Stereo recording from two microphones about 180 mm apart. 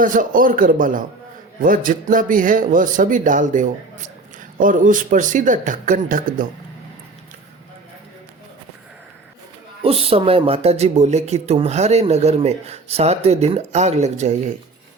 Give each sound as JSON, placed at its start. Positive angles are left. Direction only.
{"t": 0.0, "sound": "speech", "side_deg": -50}
{"t": 9.8, "sound": "speech", "side_deg": -30}